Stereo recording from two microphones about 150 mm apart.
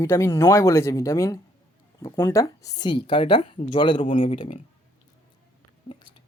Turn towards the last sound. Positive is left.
turn(degrees=30)  # may be behind; listen again after turning